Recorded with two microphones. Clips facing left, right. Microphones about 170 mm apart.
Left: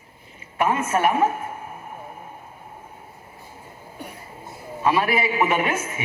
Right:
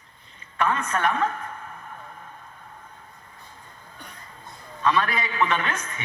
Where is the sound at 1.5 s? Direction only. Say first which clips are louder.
Left 4 dB; 25° left (ahead or behind).